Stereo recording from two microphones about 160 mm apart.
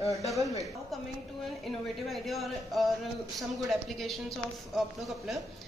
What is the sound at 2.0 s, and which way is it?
A woman's voice, centre (ahead or behind).